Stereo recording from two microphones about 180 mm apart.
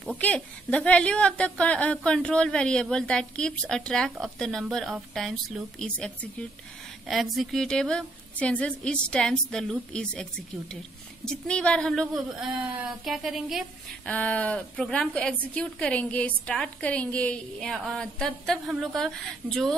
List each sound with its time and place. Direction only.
0.2 s a woman's voice: 5° left (ahead or behind)
11.2 s a woman's voice: 5° left (ahead or behind)